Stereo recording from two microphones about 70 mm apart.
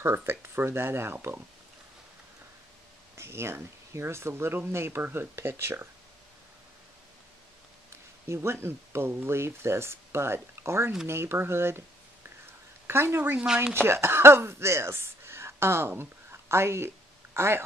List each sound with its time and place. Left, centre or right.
0.0 s speech: right
3.2 s speech: right
8.3 s speech: right
12.8 s speech: right
16.0 s a sound: right